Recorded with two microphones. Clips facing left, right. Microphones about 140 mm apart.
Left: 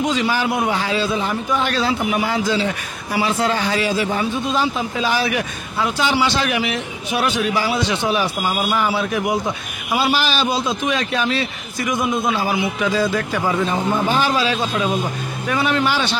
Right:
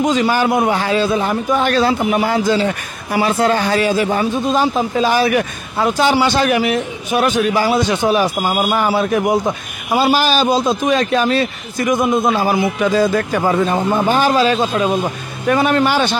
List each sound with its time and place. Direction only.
0.0 s a man's voice: 45° right (ahead or behind)